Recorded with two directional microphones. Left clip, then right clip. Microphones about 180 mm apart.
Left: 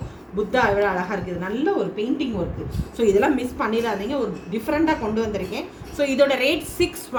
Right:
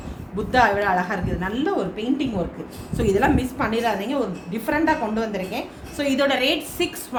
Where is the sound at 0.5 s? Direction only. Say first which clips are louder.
Right 2 dB; 25° right (ahead or behind).